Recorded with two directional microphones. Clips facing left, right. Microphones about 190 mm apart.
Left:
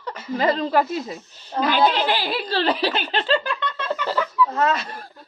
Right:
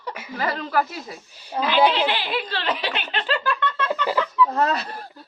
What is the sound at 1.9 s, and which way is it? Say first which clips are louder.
Speech: left 1 dB; 40° left (ahead or behind).